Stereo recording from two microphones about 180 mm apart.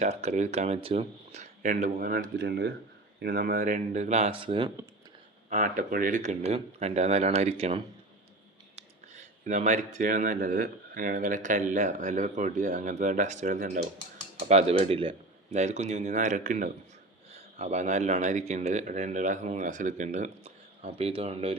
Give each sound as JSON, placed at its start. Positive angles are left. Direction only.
{"t": 0.0, "sound": "speech", "side_deg": -40}
{"t": 5.5, "sound": "speech", "side_deg": -45}
{"t": 9.5, "sound": "speech", "side_deg": -45}
{"t": 14.4, "sound": "speech", "side_deg": -35}